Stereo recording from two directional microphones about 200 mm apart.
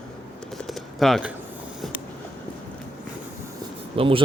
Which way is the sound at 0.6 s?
Centre (ahead or behind).